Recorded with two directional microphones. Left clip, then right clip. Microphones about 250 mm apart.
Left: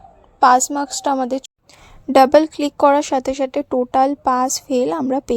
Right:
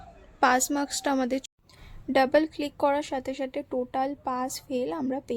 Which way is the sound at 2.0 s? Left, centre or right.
Left.